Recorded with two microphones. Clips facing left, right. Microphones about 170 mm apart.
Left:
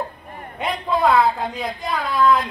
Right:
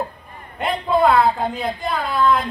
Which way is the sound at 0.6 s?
5° right (ahead or behind).